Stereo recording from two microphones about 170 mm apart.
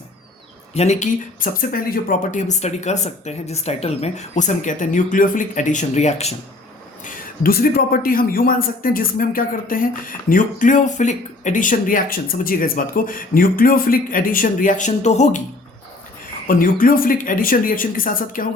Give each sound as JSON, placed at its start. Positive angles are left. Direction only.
{"t": 0.7, "sound": "speech", "side_deg": 40}
{"t": 7.0, "sound": "speech", "side_deg": 60}
{"t": 16.5, "sound": "speech", "side_deg": 55}